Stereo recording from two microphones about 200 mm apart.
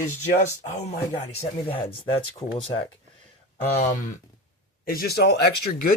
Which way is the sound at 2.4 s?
15° left (ahead or behind).